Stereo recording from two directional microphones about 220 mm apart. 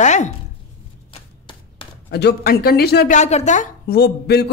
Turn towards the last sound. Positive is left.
turn(degrees=45)  # may be behind; listen again after turning